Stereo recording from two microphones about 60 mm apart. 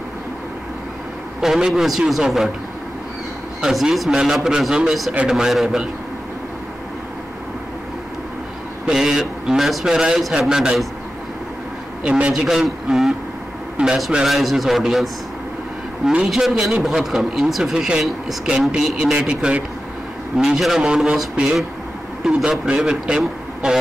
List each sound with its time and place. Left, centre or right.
1.4 s a man's voice: centre
3.6 s a man's voice: centre
8.8 s a man's voice: centre
12.0 s a man's voice: centre
12.4 s a man's voice: centre
13.7 s a man's voice: centre
16.3 s a man's voice: centre